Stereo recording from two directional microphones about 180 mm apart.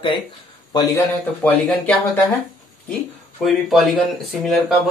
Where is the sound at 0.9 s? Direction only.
10° left (ahead or behind).